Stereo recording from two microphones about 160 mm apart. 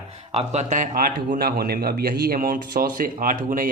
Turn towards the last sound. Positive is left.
turn(degrees=-55)  # may be behind; listen again after turning